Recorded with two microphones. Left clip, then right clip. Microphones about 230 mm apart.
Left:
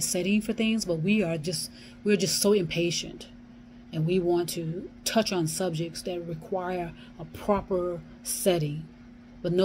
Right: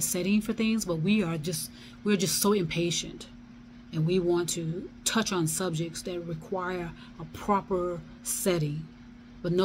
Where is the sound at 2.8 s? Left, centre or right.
Right.